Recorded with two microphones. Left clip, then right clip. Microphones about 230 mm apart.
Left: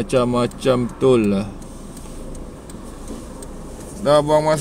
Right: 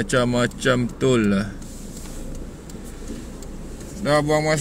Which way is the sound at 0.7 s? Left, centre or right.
Right.